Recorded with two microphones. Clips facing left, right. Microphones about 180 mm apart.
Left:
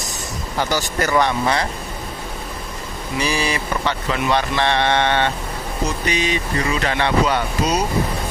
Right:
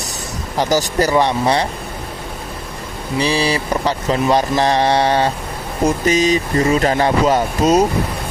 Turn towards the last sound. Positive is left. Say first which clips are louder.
# right 7 dB
turn(degrees=-45)  # may be behind; listen again after turning